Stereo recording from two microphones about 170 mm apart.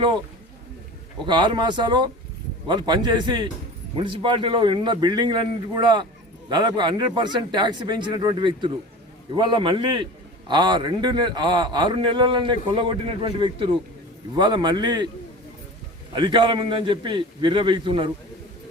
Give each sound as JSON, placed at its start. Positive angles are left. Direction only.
{"t": 1.2, "sound": "a man's voice", "side_deg": -25}
{"t": 16.1, "sound": "a man's voice", "side_deg": -25}